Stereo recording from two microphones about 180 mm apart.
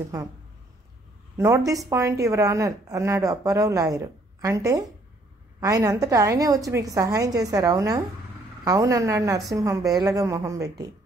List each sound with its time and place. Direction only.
1.3 s a woman's voice: 15° right (ahead or behind)